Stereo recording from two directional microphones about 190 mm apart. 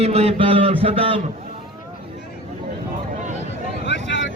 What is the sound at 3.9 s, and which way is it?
Vehicle, 75° left (ahead or behind).